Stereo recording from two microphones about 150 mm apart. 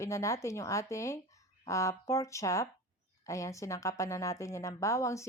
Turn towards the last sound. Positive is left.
turn(degrees=20)  # may be behind; listen again after turning